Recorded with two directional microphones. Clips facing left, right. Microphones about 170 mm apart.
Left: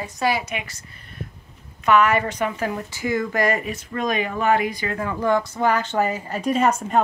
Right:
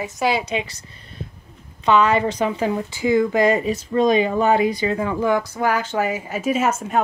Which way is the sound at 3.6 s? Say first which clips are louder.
Right 8 dB; 30° right (ahead or behind).